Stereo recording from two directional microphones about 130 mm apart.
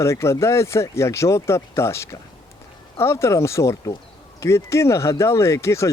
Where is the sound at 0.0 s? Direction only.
20° left (ahead or behind).